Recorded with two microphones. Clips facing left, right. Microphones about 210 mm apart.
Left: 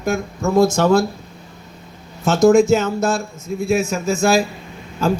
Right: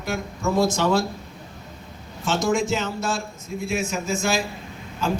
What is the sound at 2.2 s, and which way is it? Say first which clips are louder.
Speech: left 10 dB; 45° left (ahead or behind).